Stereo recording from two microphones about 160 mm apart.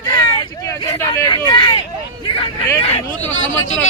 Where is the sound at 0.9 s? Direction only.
20° left (ahead or behind).